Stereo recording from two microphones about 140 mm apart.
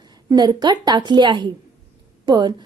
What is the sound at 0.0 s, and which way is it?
A woman's voice, 30° right (ahead or behind).